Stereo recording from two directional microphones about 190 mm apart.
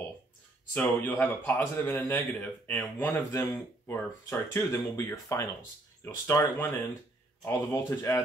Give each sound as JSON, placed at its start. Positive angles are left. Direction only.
{"t": 0.7, "sound": "speech", "side_deg": 10}